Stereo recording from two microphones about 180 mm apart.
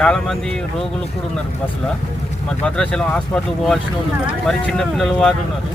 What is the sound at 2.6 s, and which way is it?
Speech, 5° left (ahead or behind).